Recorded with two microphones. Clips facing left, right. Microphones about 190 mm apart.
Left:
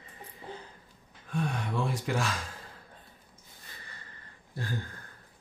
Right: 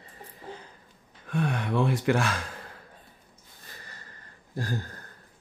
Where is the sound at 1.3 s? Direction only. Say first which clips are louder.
Right 4 dB; 65° right (ahead or behind).